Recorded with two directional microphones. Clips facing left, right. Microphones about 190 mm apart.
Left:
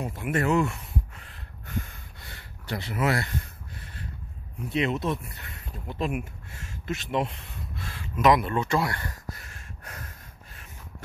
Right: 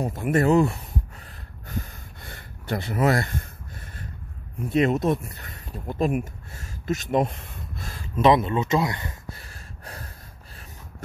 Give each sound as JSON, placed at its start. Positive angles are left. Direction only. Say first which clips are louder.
{"t": 0.0, "sound": "a sound", "louder": "right 5 dB", "side_deg": -40}
{"t": 4.6, "sound": "speech", "louder": "right 6 dB", "side_deg": -45}
{"t": 8.2, "sound": "speech", "louder": "right 3 dB", "side_deg": -25}
{"t": 9.4, "sound": "gasp", "louder": "right 2 dB", "side_deg": -35}